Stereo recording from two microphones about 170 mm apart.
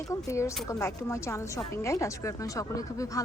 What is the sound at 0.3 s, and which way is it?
A woman's voice, 15° left (ahead or behind).